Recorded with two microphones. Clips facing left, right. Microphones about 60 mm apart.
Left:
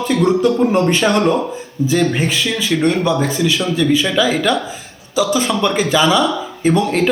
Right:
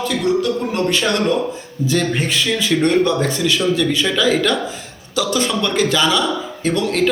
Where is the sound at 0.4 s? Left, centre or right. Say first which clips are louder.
Left 6 dB; left.